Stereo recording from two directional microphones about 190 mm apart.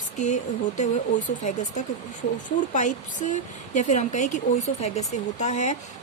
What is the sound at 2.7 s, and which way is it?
Speech, 40° left (ahead or behind).